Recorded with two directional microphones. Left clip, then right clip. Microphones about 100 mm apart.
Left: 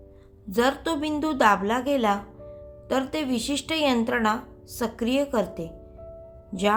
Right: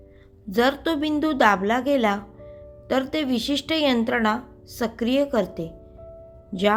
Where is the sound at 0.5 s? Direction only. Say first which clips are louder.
Right 2 dB; 40° right (ahead or behind).